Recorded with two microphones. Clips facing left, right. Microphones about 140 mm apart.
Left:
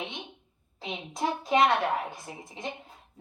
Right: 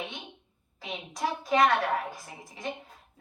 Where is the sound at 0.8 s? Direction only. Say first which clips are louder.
Left 1 dB; 25° left (ahead or behind).